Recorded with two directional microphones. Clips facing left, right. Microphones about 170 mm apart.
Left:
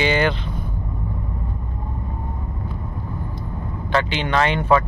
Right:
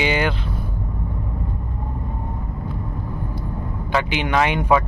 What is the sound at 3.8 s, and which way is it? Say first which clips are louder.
Speech: left 1 dB; 10° right (ahead or behind).